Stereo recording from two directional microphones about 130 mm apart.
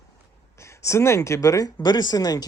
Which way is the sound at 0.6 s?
20° left (ahead or behind).